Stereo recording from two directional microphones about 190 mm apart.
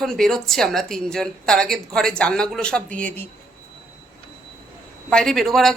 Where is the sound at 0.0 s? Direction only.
Centre (ahead or behind).